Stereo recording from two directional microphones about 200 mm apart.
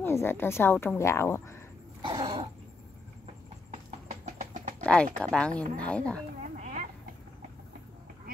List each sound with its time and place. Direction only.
0.0 s a woman's voice: 10° left (ahead or behind)
2.0 s cough: 25° right (ahead or behind)
3.7 s clip-clop: 35° right (ahead or behind)
4.8 s speech: 5° left (ahead or behind)
6.5 s a sound: 40° right (ahead or behind)